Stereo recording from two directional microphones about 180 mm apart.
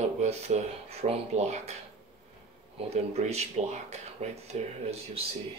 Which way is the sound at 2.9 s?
35° right (ahead or behind).